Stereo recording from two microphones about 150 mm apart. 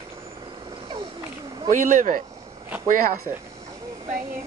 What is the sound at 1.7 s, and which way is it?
Speech, 55° right (ahead or behind).